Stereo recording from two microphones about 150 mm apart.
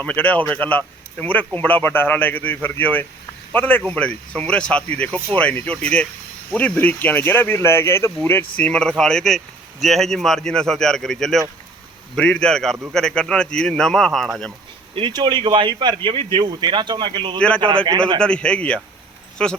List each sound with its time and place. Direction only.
0.0 s speech: 10° left (ahead or behind)
14.9 s speech: 30° right (ahead or behind)
18.2 s speech: 5° left (ahead or behind)